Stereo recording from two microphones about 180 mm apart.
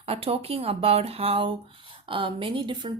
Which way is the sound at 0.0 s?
35° right (ahead or behind).